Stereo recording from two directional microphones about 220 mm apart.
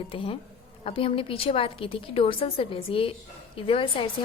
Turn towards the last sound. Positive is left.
turn(degrees=25)  # may be behind; listen again after turning